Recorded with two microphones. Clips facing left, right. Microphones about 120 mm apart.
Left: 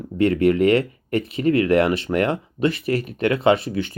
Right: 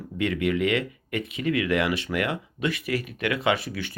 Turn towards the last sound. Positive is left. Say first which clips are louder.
# left 7 dB
turn(degrees=30)  # may be behind; listen again after turning